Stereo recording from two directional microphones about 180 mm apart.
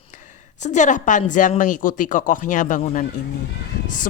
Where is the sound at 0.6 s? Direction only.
40° left (ahead or behind).